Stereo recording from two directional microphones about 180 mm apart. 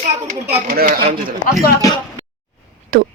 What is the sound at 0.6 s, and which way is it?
Speech, 55° right (ahead or behind).